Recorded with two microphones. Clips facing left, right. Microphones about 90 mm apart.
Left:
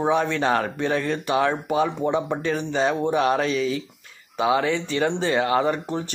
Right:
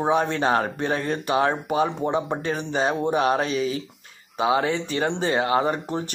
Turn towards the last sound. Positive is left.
turn(degrees=-30)  # may be behind; listen again after turning